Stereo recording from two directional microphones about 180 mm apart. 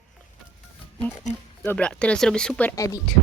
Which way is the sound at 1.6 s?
5° left (ahead or behind).